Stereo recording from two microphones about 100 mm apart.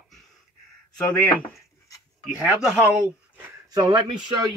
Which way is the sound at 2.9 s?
15° right (ahead or behind).